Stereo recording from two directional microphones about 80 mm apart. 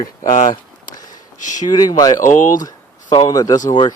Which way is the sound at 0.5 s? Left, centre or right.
Left.